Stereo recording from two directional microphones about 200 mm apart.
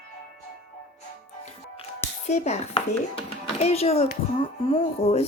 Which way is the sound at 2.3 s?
35° left (ahead or behind).